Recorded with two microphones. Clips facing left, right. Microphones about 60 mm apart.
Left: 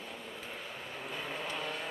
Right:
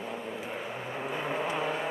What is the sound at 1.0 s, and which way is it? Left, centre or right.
Vehicle, right.